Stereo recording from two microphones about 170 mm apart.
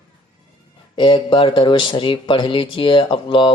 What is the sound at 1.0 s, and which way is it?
Speech, 30° left (ahead or behind).